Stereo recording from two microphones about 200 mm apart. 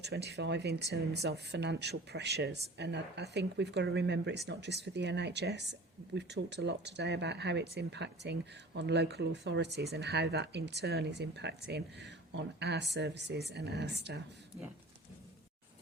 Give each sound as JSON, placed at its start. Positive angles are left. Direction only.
{"t": 0.0, "sound": "speech", "side_deg": -55}